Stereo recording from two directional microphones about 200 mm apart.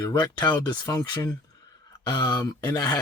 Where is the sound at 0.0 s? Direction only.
20° left (ahead or behind).